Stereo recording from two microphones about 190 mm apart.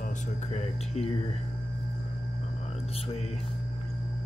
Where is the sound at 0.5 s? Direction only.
35° left (ahead or behind).